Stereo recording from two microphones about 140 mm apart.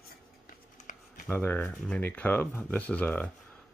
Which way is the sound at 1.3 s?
10° left (ahead or behind).